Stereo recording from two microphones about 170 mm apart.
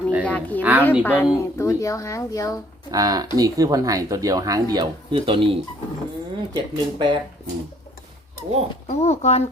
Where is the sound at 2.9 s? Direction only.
20° right (ahead or behind).